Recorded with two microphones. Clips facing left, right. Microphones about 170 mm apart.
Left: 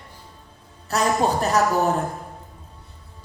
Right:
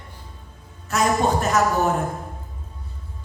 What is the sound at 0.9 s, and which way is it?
Speech, 35° left (ahead or behind).